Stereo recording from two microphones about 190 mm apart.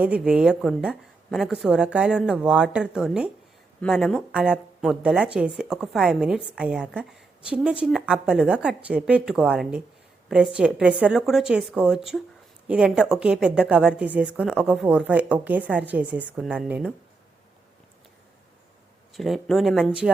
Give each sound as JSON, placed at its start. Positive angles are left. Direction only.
{"t": 0.0, "sound": "speech", "side_deg": -5}
{"t": 19.1, "sound": "speech", "side_deg": 0}